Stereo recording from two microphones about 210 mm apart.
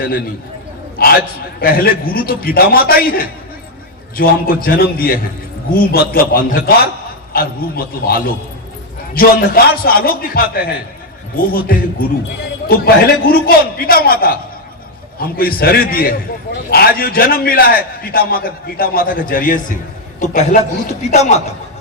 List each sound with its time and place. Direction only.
0.9 s a man's voice: 45° left (ahead or behind)